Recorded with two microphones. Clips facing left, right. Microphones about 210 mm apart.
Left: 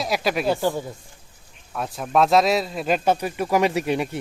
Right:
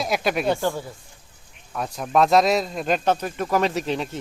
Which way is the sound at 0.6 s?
15° left (ahead or behind).